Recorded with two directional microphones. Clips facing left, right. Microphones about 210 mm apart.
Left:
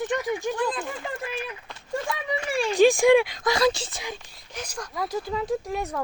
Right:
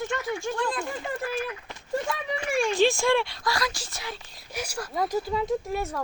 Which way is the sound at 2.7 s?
15° left (ahead or behind).